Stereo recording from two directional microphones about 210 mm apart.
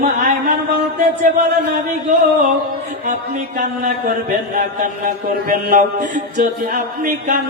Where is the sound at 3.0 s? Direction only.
40° right (ahead or behind).